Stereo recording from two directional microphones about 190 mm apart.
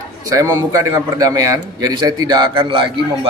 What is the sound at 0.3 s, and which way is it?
A man's voice, 15° right (ahead or behind).